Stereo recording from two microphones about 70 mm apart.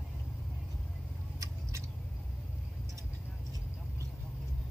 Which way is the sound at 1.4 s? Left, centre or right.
Right.